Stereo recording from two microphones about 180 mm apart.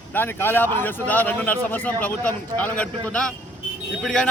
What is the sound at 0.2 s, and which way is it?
A man's voice, 10° left (ahead or behind).